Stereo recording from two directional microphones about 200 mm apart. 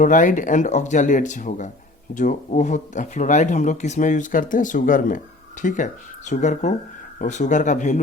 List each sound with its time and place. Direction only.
0.0 s speech: 40° left (ahead or behind)